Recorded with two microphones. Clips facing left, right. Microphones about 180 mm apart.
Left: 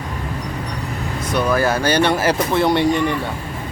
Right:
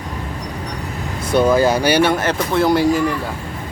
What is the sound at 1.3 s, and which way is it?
Speech, 25° right (ahead or behind).